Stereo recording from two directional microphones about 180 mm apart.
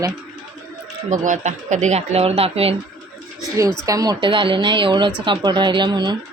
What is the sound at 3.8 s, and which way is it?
A woman's voice, 20° right (ahead or behind).